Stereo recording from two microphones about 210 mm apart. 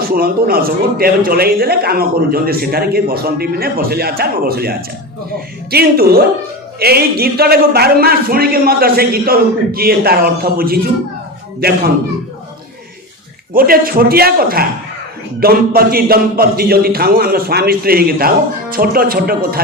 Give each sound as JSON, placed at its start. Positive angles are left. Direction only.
{"t": 0.1, "sound": "a man's voice", "side_deg": -45}
{"t": 13.5, "sound": "a man's voice", "side_deg": -45}